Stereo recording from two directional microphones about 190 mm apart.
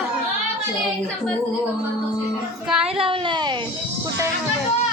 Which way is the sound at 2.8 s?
30° right (ahead or behind).